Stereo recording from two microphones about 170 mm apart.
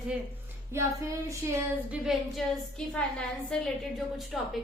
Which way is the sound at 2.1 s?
Centre (ahead or behind).